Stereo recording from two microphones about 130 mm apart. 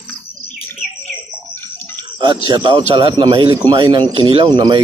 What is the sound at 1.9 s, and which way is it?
Speech, 35° right (ahead or behind).